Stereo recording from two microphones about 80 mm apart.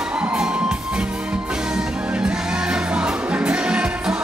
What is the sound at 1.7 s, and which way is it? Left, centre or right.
Music, centre.